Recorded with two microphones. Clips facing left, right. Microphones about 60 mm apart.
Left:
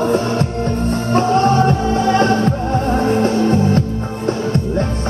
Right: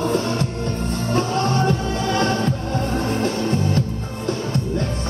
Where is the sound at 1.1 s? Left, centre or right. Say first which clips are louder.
Left 7 dB; left.